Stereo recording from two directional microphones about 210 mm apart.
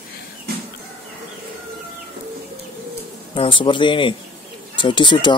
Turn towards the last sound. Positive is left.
turn(degrees=20)  # may be behind; listen again after turning